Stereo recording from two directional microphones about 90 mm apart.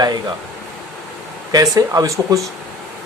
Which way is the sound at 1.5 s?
40° right (ahead or behind).